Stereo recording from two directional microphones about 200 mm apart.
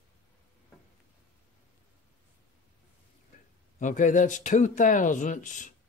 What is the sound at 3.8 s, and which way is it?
Speech, 40° left (ahead or behind).